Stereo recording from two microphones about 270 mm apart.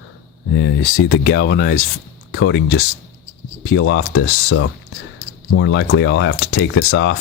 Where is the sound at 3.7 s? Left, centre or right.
Left.